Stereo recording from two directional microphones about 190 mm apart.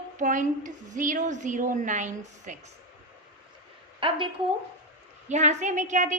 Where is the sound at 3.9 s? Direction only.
25° right (ahead or behind).